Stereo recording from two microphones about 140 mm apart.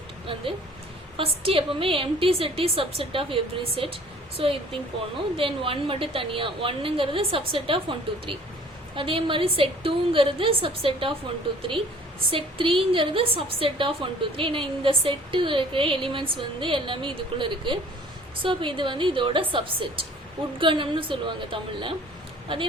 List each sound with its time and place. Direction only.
1.1 s a woman's voice: 40° right (ahead or behind)
12.3 s a woman's voice: 40° right (ahead or behind)